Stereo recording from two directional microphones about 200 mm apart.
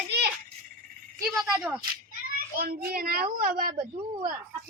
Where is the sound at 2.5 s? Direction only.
50° right (ahead or behind).